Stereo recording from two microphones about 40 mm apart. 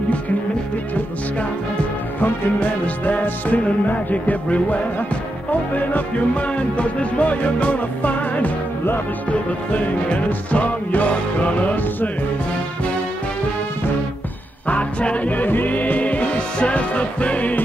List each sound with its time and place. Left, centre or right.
2.1 s music: left
2.8 s music: left
5.8 s music: left
14.7 s music: left